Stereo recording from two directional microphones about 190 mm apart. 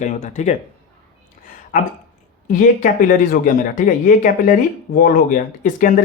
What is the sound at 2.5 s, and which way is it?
Speech, 45° left (ahead or behind).